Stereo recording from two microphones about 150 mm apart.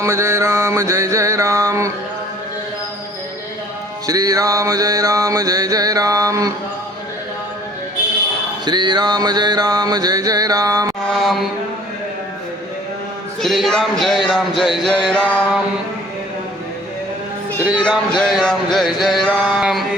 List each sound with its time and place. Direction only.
0.0 s mantra: 20° right (ahead or behind)
4.0 s mantra: 25° right (ahead or behind)
8.6 s mantra: 30° right (ahead or behind)
11.1 s music: centre (ahead or behind)
13.4 s music: centre (ahead or behind)
17.7 s speech: 30° left (ahead or behind)
18.2 s music: 5° left (ahead or behind)